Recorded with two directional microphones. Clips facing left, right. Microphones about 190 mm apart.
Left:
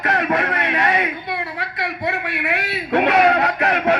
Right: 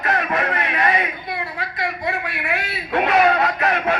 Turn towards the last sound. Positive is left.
turn(degrees=65)  # may be behind; listen again after turning